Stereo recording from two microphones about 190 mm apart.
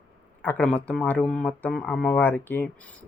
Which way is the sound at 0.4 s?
5° left (ahead or behind).